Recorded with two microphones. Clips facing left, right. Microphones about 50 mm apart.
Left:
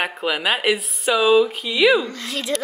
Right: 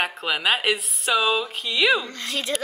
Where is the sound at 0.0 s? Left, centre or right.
Centre.